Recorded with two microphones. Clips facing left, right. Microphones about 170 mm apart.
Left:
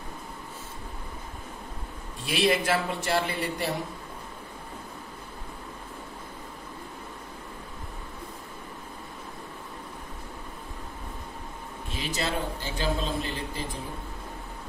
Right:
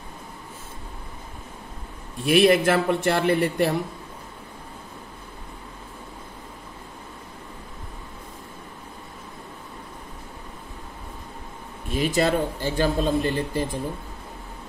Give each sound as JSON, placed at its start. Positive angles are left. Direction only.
{"t": 2.2, "sound": "a man's voice", "side_deg": -55}
{"t": 11.9, "sound": "speech", "side_deg": -50}